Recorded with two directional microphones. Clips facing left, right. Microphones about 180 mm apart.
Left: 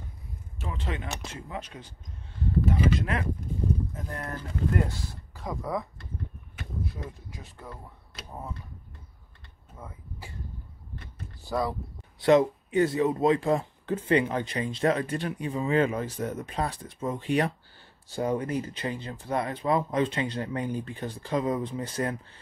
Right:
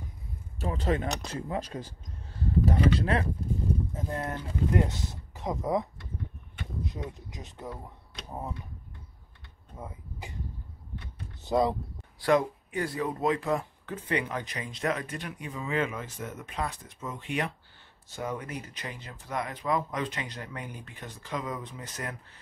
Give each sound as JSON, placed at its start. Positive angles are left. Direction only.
{"t": 0.6, "sound": "speech", "side_deg": -40}
{"t": 3.0, "sound": "speech", "side_deg": -30}
{"t": 9.8, "sound": "speech", "side_deg": -20}
{"t": 11.4, "sound": "speech", "side_deg": -20}
{"t": 12.2, "sound": "speech", "side_deg": 25}